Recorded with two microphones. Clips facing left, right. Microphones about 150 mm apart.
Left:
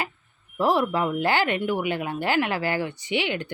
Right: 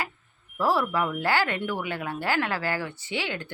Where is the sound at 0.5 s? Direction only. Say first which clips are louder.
Left 3 dB; 20° left (ahead or behind).